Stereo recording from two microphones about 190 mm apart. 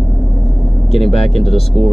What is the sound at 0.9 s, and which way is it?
Speech, centre (ahead or behind).